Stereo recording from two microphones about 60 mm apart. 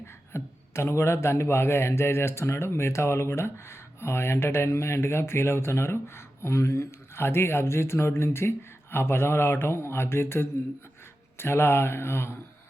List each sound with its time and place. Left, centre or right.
0.3 s a man's voice: left